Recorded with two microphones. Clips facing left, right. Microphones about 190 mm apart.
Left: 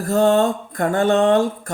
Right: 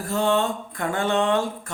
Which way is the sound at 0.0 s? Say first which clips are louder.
Left 7 dB; 45° left (ahead or behind).